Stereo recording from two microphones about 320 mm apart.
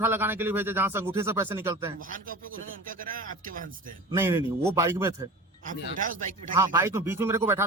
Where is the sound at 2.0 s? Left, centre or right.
Right.